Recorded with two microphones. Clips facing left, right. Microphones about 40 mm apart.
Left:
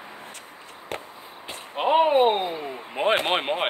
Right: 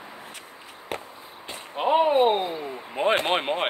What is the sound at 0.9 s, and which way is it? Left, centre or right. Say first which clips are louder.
Fireworks: right 1 dB; centre.